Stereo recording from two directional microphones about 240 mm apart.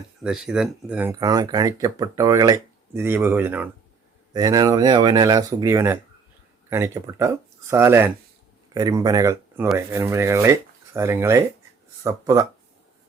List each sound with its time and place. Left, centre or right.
0.2 s speech: centre